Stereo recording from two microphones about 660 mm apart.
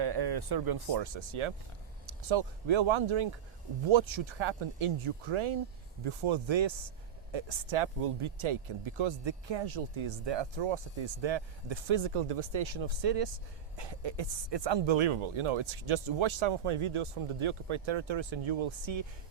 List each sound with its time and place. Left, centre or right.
0.0 s speech: right